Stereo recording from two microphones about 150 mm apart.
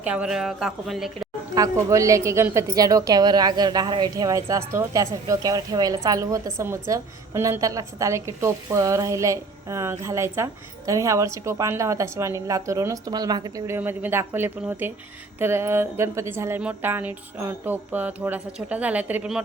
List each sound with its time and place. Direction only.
0.0 s a woman's voice: 10° right (ahead or behind)
1.5 s a woman's voice: 20° right (ahead or behind)
13.7 s a woman's voice: 15° right (ahead or behind)